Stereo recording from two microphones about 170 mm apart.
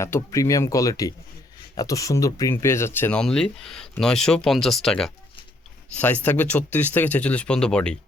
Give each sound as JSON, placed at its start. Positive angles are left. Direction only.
{"t": 0.0, "sound": "speech", "side_deg": 20}